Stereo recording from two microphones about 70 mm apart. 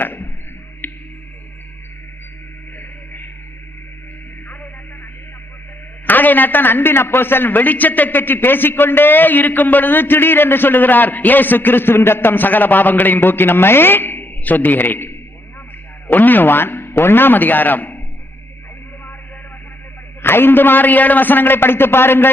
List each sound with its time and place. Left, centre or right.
0.0 s arrow: left
0.8 s music: left
2.7 s music: left
6.1 s a man's voice: left
20.2 s a man's voice: left